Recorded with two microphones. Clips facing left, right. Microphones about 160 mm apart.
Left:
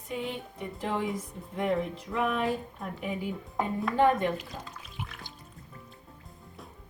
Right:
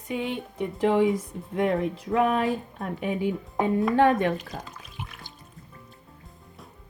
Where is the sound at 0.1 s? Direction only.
90° right.